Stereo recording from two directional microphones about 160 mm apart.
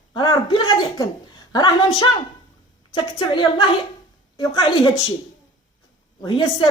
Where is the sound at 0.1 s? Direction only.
30° left (ahead or behind).